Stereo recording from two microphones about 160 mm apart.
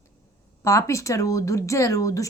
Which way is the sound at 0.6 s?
20° left (ahead or behind).